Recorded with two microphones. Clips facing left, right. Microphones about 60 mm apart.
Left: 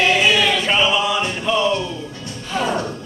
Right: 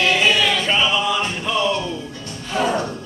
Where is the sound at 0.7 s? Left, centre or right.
Centre.